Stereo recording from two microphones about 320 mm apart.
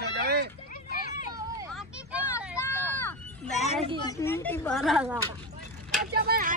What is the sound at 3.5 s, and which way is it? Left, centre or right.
Children playing, left.